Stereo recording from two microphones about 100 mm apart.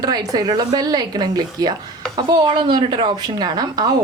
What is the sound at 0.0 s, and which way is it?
A woman's voice, 40° right (ahead or behind).